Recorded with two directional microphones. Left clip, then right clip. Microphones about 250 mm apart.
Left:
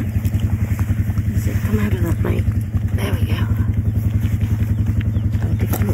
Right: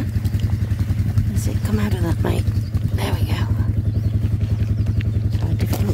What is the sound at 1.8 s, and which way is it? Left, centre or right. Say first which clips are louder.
Speech: even; centre.